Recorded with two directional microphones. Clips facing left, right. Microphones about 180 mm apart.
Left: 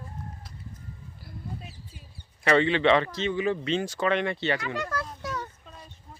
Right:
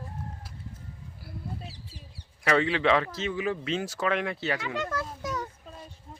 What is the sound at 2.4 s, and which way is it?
Speech, centre (ahead or behind).